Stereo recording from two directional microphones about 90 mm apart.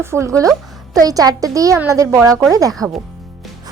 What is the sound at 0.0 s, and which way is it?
A woman's voice, 30° right (ahead or behind).